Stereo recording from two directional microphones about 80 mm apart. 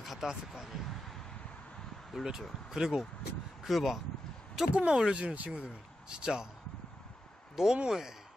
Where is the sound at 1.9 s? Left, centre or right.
Centre.